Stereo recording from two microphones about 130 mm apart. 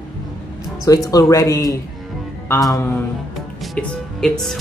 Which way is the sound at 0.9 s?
25° left (ahead or behind).